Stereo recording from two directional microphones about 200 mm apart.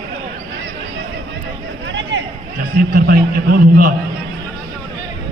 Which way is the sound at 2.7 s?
50° right (ahead or behind).